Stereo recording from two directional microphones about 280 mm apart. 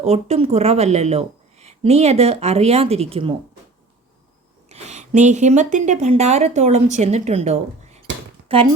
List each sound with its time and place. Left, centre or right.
0.0 s speech: right
4.7 s a woman's voice: right